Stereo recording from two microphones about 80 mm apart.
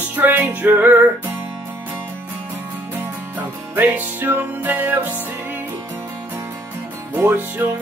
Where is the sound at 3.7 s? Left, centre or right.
Right.